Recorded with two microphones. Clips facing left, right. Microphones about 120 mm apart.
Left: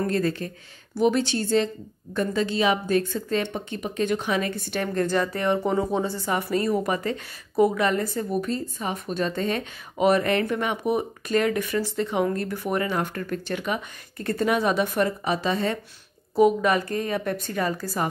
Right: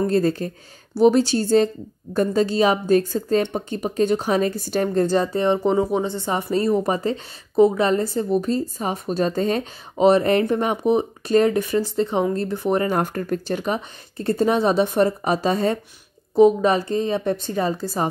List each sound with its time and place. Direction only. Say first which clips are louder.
0.0 s speech: right 5 dB; 35° right (ahead or behind)
5.6 s a woman's voice: right 4 dB; 15° right (ahead or behind)